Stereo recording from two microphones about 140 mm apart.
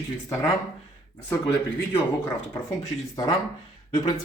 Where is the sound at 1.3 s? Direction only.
15° left (ahead or behind).